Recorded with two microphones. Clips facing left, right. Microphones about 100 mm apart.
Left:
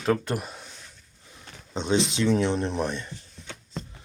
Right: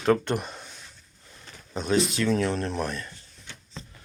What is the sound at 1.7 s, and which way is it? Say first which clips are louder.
Speech: even; 25° left (ahead or behind).